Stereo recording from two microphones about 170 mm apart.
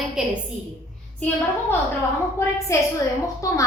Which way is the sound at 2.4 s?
15° left (ahead or behind).